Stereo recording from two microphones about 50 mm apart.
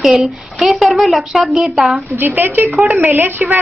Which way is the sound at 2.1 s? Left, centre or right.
Right.